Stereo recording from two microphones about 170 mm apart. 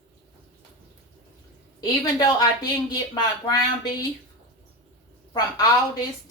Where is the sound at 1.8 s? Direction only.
25° left (ahead or behind).